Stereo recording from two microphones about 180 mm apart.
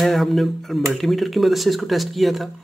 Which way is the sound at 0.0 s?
Centre (ahead or behind).